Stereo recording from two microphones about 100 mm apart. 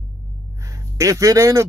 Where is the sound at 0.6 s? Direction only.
35° right (ahead or behind).